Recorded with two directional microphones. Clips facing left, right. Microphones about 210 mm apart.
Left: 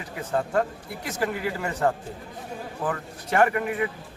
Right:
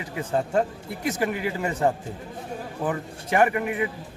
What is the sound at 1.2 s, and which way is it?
Speech, 20° right (ahead or behind).